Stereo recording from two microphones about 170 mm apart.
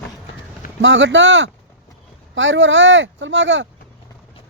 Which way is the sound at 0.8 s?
90° right.